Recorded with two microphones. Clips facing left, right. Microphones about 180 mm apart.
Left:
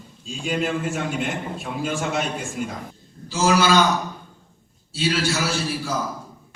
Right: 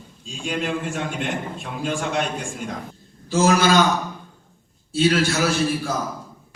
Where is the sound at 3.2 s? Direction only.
50° right (ahead or behind).